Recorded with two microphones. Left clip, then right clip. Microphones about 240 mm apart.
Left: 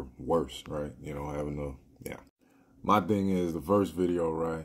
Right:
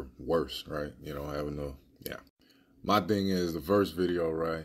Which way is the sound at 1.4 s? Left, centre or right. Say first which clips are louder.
Even; right.